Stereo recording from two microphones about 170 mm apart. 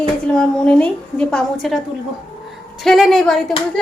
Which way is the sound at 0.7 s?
5° left (ahead or behind).